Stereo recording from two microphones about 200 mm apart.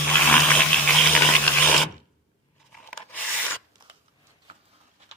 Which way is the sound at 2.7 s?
5° left (ahead or behind).